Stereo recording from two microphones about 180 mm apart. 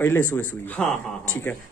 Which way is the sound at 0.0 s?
10° left (ahead or behind).